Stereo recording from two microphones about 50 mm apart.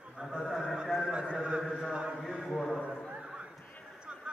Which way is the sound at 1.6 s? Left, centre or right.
Centre.